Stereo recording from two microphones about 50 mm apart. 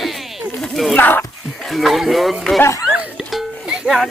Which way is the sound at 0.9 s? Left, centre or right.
Left.